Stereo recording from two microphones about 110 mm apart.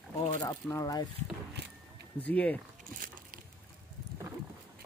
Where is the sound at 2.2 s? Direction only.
15° left (ahead or behind).